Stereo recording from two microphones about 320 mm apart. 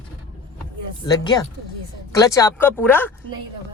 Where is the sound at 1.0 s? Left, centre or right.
Centre.